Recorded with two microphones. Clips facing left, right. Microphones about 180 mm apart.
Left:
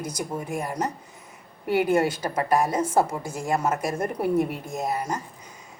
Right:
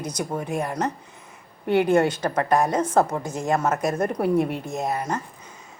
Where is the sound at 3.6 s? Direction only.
50° right (ahead or behind).